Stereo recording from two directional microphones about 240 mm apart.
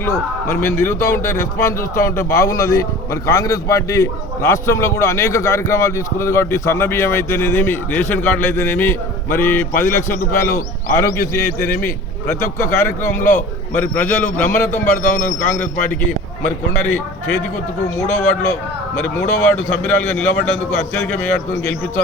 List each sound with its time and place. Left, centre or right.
0.0 s a man's voice: centre
18.9 s a man's voice: centre